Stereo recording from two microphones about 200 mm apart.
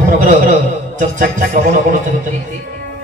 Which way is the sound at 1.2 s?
40° right (ahead or behind).